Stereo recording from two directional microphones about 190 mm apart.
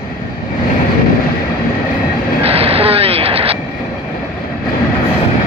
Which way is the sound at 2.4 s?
30° right (ahead or behind).